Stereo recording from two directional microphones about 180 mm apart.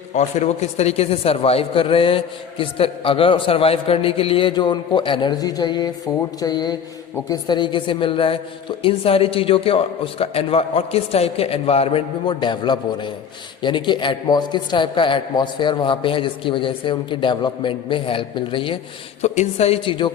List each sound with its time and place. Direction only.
0.1 s a man's voice: 40° left (ahead or behind)